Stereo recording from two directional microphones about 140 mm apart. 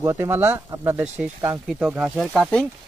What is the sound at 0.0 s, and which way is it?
Speech, 20° right (ahead or behind).